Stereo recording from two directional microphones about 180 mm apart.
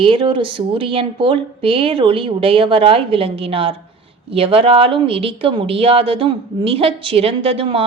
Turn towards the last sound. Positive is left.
turn(degrees=-30)  # may be behind; listen again after turning